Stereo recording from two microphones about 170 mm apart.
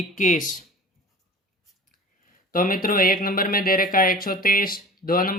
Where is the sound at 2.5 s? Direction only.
55° left (ahead or behind).